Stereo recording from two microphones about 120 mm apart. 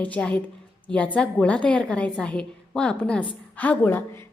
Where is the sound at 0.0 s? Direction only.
10° left (ahead or behind).